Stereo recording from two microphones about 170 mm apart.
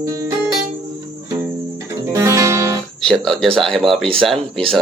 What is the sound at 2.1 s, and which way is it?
Guitar, 15° right (ahead or behind).